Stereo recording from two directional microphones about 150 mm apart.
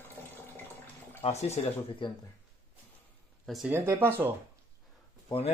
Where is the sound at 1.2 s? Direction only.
45° left (ahead or behind).